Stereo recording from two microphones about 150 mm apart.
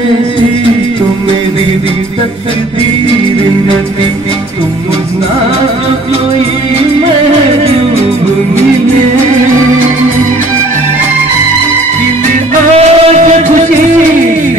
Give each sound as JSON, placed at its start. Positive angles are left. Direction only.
{"t": 12.7, "sound": "music", "side_deg": -50}